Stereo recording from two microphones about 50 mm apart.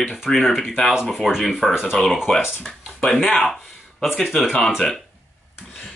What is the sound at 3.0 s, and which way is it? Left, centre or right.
Speech, centre.